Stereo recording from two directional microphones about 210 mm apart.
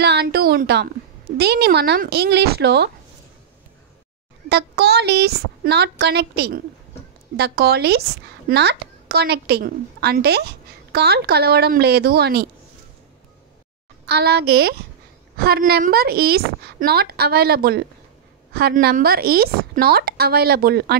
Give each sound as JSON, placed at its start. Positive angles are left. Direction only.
{"t": 0.0, "sound": "a sound", "side_deg": -50}
{"t": 1.4, "sound": "a child's voice", "side_deg": -50}
{"t": 4.5, "sound": "a child's voice", "side_deg": -50}
{"t": 14.0, "sound": "a child's voice", "side_deg": -50}